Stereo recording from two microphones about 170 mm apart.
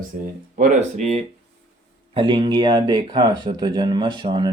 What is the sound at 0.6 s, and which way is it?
Speech, 40° right (ahead or behind).